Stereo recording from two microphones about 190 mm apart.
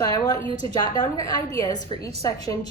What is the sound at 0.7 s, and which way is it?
A woman's voice, 20° left (ahead or behind).